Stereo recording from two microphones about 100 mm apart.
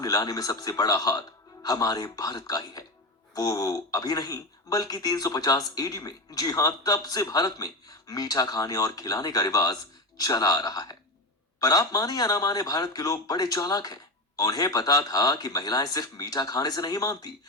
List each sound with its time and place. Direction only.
0.0 s speech: 40° left (ahead or behind)